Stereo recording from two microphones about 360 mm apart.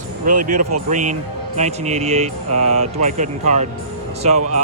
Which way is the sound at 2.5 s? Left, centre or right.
Right.